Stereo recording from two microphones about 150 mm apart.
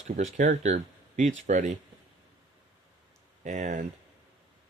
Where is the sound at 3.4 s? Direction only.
55° right (ahead or behind).